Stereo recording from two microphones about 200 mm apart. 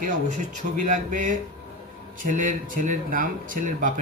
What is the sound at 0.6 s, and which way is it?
Speech, 50° right (ahead or behind).